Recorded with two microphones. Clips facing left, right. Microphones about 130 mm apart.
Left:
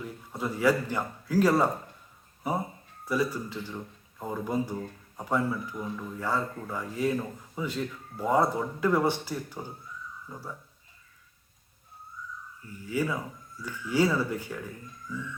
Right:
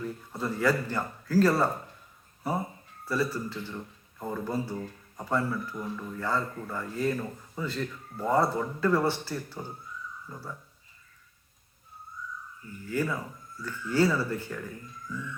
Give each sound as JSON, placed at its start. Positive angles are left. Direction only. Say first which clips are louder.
{"t": 0.0, "sound": "a man's voice", "louder": "right 1 dB", "side_deg": 10}
{"t": 12.9, "sound": "speech", "louder": "left 1 dB", "side_deg": 10}